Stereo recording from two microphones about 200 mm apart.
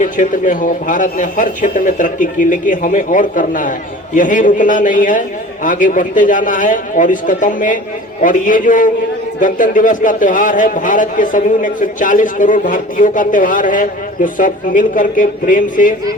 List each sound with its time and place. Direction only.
0.0 s a man's voice: 40° left (ahead or behind)